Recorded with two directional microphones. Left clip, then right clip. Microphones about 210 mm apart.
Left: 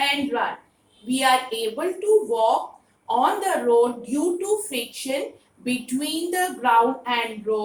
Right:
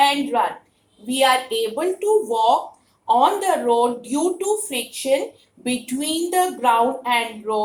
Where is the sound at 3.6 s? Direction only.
45° right (ahead or behind).